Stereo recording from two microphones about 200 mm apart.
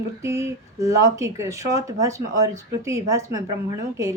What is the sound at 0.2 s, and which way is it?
Speech, 15° right (ahead or behind).